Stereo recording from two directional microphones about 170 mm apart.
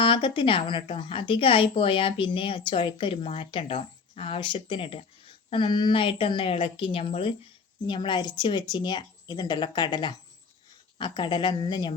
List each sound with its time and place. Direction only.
0.0 s speech: 30° left (ahead or behind)